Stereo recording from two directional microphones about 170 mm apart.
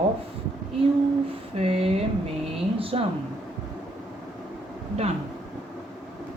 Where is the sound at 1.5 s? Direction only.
35° right (ahead or behind).